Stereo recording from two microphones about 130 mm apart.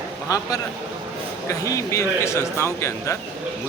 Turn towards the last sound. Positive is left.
turn(degrees=20)  # may be behind; listen again after turning